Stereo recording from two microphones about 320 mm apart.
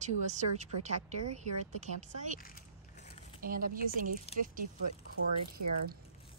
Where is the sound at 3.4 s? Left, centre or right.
Right.